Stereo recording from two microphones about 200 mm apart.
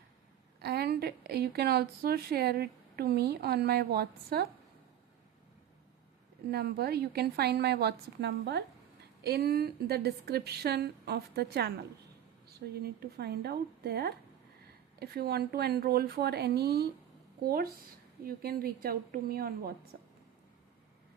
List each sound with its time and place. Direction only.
0.6 s speech: 55° right (ahead or behind)
6.5 s speech: 50° right (ahead or behind)